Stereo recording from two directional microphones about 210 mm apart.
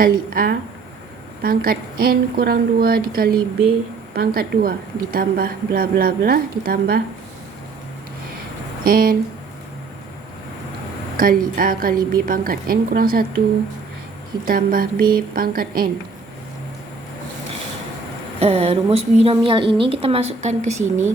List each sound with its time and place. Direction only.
0.0 s a woman's voice: 45° right (ahead or behind)
8.8 s speech: 45° right (ahead or behind)
11.2 s a woman's voice: 40° right (ahead or behind)
14.4 s a woman's voice: 40° right (ahead or behind)
18.3 s a woman's voice: 30° right (ahead or behind)